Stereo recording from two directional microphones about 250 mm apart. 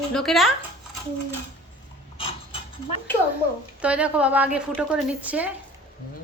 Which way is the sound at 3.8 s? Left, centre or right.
Centre.